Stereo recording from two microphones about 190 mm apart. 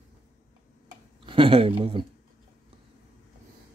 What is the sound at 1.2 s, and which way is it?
Speech, 25° right (ahead or behind).